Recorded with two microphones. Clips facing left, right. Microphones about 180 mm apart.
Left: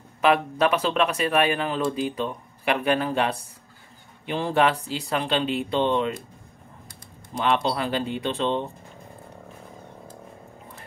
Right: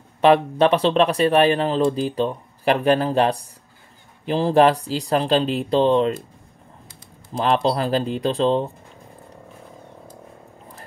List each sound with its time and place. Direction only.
0.2 s speech: 30° right (ahead or behind)
7.4 s speech: 35° right (ahead or behind)